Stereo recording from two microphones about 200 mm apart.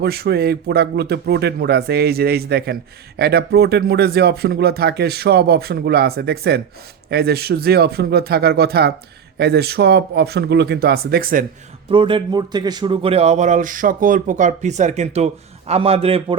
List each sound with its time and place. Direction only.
0.0 s speech: 50° right (ahead or behind)
11.9 s speech: 25° right (ahead or behind)